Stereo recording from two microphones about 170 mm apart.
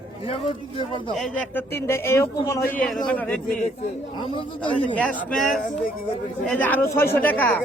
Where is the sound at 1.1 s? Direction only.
5° left (ahead or behind).